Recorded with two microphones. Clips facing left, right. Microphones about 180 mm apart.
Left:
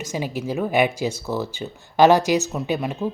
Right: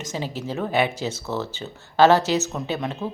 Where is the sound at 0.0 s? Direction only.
10° left (ahead or behind).